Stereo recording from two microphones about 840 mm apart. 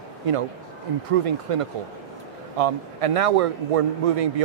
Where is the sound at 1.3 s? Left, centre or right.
Right.